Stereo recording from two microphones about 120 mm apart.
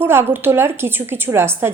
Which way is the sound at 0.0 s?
20° right (ahead or behind).